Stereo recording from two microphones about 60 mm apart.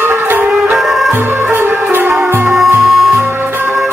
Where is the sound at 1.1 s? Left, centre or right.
Right.